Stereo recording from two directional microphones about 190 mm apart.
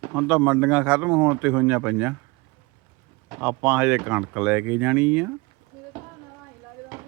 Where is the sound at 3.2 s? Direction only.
10° right (ahead or behind).